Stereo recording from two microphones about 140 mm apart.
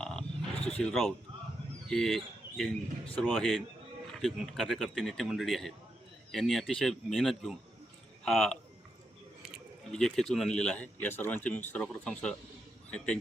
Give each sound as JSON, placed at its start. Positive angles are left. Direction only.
{"t": 0.0, "sound": "wild animals", "side_deg": 5}
{"t": 0.7, "sound": "speech", "side_deg": 5}
{"t": 9.9, "sound": "speech", "side_deg": 5}